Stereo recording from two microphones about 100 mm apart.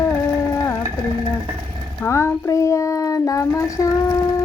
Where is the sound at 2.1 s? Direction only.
30° left (ahead or behind).